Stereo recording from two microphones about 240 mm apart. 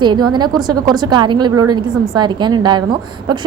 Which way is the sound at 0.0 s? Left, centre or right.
Centre.